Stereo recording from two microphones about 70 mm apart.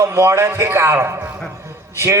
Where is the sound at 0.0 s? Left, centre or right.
Right.